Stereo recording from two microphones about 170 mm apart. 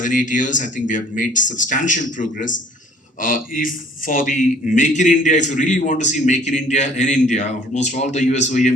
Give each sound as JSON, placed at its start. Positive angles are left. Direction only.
{"t": 0.0, "sound": "a man's voice", "side_deg": 50}